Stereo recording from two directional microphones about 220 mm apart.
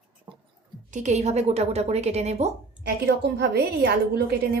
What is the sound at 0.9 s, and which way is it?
A woman's voice, 30° right (ahead or behind).